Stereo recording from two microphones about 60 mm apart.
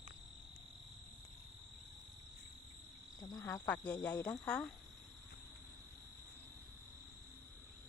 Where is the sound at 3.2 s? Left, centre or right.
Left.